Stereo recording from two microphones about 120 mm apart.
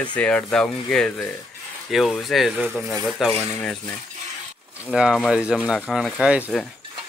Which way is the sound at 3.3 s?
10° left (ahead or behind).